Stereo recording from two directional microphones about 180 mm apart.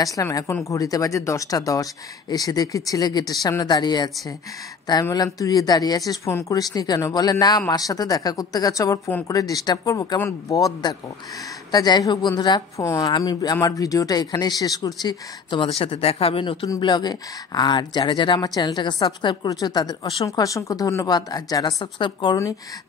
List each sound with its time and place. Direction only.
0.0 s a woman's voice: 20° left (ahead or behind)